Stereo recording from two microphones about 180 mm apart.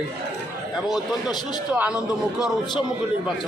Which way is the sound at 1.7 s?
10° right (ahead or behind).